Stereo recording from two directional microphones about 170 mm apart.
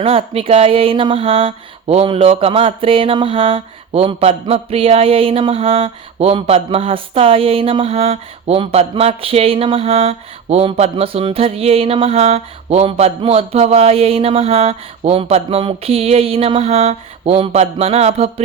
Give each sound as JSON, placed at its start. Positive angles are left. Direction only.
{"t": 0.0, "sound": "speech", "side_deg": -35}